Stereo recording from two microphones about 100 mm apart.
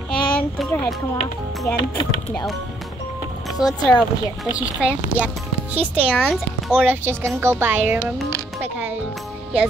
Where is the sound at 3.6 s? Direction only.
5° right (ahead or behind).